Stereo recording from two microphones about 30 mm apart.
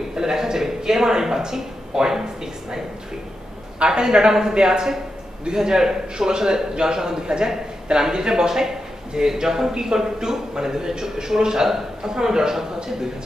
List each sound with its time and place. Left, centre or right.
0.1 s a man's voice: centre
3.8 s a man's voice: right